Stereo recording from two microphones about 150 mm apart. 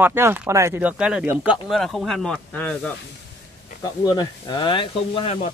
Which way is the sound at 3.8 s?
25° left (ahead or behind).